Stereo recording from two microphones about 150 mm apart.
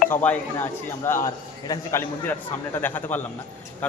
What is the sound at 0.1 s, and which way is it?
A man's voice, 10° left (ahead or behind).